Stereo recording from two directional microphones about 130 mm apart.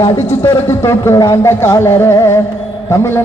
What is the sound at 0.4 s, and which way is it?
Speech, 20° left (ahead or behind).